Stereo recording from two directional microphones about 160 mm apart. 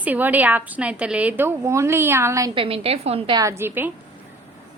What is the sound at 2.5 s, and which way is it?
Speech, 35° right (ahead or behind).